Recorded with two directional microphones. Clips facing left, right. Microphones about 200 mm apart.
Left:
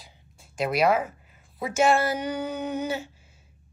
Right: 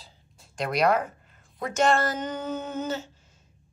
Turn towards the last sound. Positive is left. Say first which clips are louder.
# left 2 dB
turn(degrees=10)  # may be behind; listen again after turning